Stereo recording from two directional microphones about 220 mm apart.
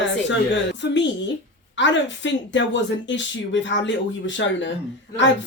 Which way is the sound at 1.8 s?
55° left (ahead or behind).